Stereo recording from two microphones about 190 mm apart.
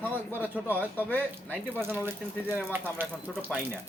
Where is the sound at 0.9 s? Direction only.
10° left (ahead or behind).